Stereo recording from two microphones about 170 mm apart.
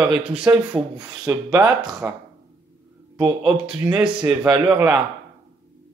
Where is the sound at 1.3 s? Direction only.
15° right (ahead or behind).